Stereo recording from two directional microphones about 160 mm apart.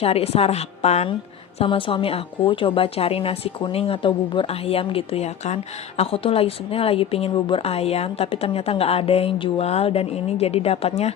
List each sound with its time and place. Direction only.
0.0 s speech: 40° left (ahead or behind)